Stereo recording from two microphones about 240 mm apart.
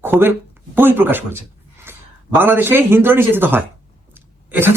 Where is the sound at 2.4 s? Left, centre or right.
Centre.